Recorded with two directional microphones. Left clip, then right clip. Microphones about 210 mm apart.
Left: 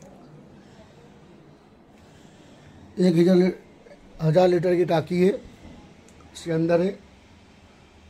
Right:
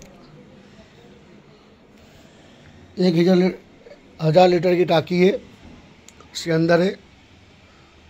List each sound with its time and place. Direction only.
2.9 s a man's voice: 5° left (ahead or behind)
6.3 s speech: 20° right (ahead or behind)